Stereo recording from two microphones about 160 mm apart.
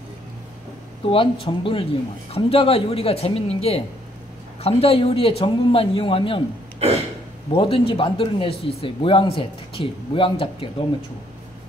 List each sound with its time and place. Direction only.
1.1 s speech: 35° left (ahead or behind)
6.8 s gasp: 40° right (ahead or behind)
7.5 s speech: 35° left (ahead or behind)